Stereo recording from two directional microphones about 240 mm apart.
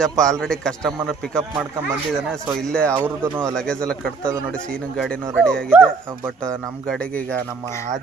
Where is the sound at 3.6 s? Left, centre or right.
Centre.